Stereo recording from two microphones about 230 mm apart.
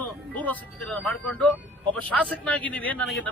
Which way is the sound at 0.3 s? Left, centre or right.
Centre.